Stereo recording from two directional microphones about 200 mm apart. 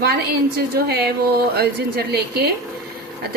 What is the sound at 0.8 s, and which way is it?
A woman's voice, 50° right (ahead or behind).